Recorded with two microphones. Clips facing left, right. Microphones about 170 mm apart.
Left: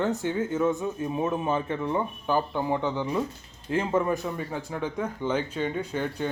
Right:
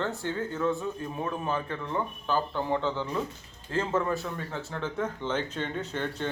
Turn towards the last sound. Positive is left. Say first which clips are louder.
# left 3 dB
turn(degrees=10)  # may be behind; listen again after turning